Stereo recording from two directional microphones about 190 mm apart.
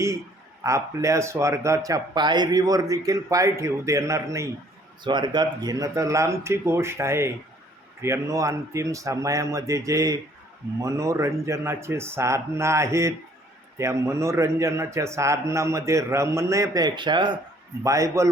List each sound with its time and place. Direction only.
0.6 s speech: 15° right (ahead or behind)